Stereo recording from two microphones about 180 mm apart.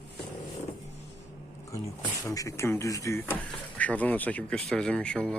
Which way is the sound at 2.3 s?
20° left (ahead or behind).